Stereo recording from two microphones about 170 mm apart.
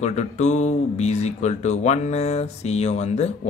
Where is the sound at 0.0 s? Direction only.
40° left (ahead or behind).